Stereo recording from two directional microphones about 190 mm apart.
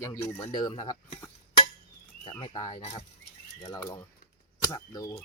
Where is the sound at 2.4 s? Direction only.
20° left (ahead or behind).